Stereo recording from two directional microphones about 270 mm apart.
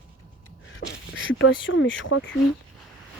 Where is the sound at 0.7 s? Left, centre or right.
Left.